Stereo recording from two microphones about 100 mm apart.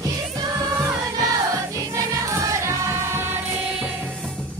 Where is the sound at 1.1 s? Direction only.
35° right (ahead or behind).